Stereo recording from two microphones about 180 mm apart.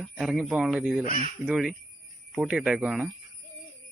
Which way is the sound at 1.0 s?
35° right (ahead or behind).